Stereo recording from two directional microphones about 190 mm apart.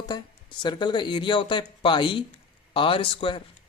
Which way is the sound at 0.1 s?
25° left (ahead or behind).